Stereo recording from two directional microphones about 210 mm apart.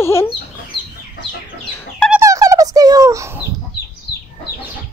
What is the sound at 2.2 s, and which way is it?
Fowl, 15° right (ahead or behind).